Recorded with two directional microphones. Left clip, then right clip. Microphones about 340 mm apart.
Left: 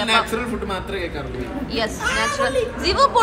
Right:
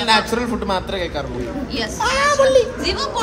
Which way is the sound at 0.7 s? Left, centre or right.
Centre.